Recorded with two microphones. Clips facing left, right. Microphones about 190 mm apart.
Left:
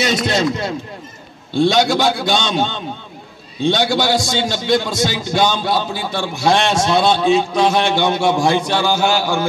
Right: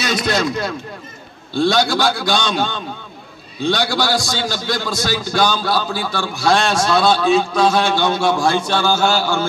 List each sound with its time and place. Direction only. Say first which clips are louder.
0.0 s a man's voice: left 2 dB; 25° left (ahead or behind)